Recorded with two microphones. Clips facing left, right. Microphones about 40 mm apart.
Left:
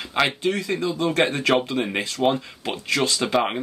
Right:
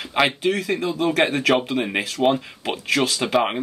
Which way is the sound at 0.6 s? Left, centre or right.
Right.